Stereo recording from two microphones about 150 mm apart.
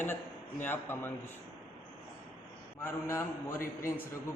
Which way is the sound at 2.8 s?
15° left (ahead or behind).